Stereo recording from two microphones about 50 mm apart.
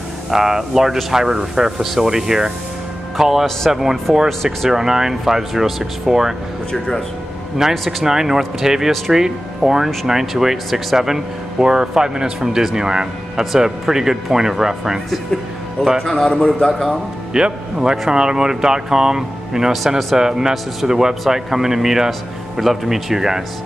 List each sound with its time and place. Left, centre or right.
0.3 s speech: centre
4.3 s speech: centre
4.6 s speech: centre
7.6 s speech: centre
16.0 s a man's voice: centre
16.6 s speech: centre
17.3 s speech: centre